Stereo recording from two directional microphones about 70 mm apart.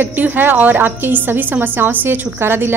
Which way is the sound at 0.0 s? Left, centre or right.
Right.